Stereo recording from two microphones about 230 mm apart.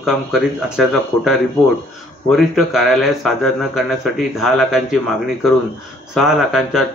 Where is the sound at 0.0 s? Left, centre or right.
Centre.